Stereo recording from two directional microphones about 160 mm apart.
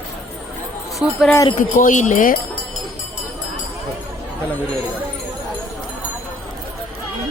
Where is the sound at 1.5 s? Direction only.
50° left (ahead or behind).